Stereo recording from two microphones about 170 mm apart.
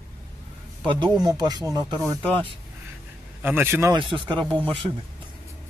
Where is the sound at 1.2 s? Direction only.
25° right (ahead or behind).